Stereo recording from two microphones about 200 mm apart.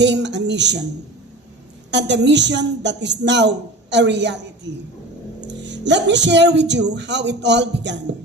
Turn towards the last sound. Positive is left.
turn(degrees=-60)  # may be behind; listen again after turning